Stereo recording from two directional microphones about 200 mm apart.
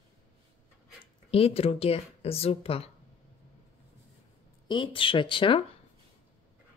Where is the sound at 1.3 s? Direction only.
30° left (ahead or behind).